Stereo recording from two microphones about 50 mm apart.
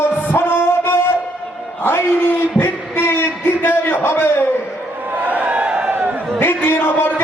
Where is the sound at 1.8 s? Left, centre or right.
Left.